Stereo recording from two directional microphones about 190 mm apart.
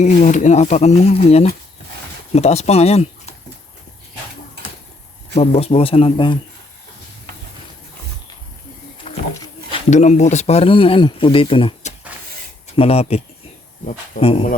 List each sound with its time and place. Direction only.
0.0 s speech: 40° left (ahead or behind)
5.3 s speech: 30° left (ahead or behind)
9.1 s a sound: 30° left (ahead or behind)
9.9 s speech: 35° left (ahead or behind)